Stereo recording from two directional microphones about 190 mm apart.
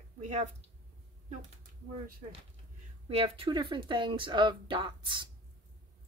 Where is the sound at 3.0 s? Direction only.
30° right (ahead or behind).